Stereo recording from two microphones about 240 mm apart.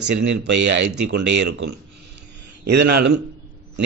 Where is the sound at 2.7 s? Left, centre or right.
Right.